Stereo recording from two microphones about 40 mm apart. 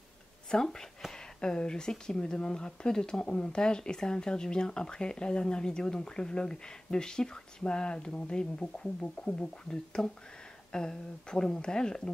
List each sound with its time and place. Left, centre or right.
0.5 s speech: centre
9.0 s speech: left
9.7 s speech: left